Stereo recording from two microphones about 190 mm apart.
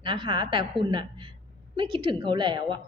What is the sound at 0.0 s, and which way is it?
A woman's voice, 25° right (ahead or behind).